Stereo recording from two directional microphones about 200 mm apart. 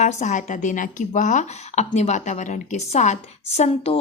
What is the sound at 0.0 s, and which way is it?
A woman's voice, 35° left (ahead or behind).